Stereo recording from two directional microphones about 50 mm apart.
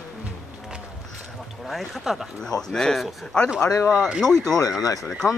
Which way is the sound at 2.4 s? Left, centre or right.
Centre.